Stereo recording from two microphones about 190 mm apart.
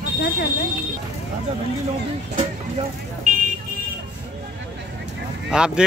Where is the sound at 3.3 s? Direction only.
45° right (ahead or behind).